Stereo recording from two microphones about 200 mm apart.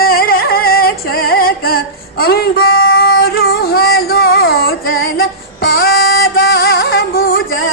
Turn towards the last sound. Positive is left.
turn(degrees=45)  # may be behind; listen again after turning